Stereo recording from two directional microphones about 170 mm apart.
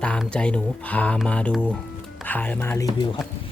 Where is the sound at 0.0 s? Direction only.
5° left (ahead or behind).